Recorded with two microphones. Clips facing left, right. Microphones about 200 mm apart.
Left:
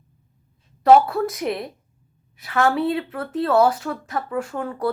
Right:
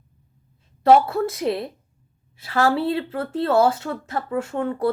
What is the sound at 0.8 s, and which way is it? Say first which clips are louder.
Speech: left 1 dB; 25° right (ahead or behind).